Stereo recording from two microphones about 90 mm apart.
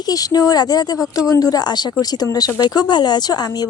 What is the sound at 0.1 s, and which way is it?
Speech, 45° left (ahead or behind).